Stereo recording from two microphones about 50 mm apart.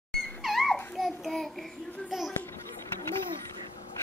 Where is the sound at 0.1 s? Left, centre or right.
Centre.